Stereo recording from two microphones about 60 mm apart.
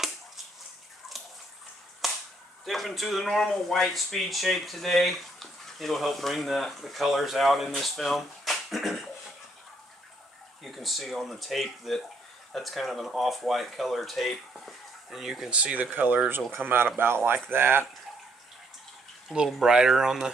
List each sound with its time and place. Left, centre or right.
2.0 s whip: centre
2.6 s speech: centre
10.6 s speech: centre
15.5 s speech: right
19.3 s speech: centre